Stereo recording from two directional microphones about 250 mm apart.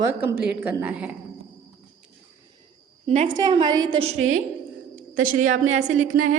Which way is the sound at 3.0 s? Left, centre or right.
Right.